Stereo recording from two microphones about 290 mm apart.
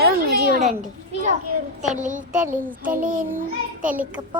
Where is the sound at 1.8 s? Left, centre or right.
Right.